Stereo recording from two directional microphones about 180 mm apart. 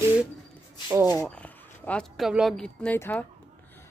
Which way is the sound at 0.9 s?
15° right (ahead or behind).